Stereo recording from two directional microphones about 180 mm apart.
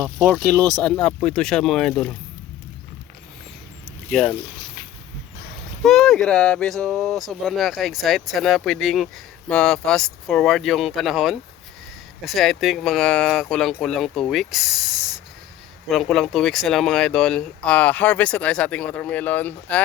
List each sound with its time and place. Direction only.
0.0 s speech: centre (ahead or behind)
0.5 s speech: 20° right (ahead or behind)
0.8 s speech: 5° left (ahead or behind)
4.1 s speech: 5° left (ahead or behind)
5.8 s speech: centre (ahead or behind)